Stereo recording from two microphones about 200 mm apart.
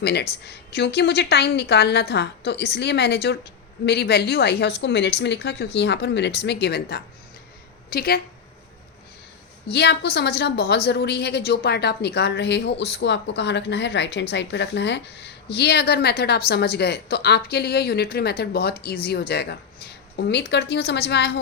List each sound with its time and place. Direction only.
0.0 s a woman's voice: 55° left (ahead or behind)
9.6 s a woman's voice: 55° left (ahead or behind)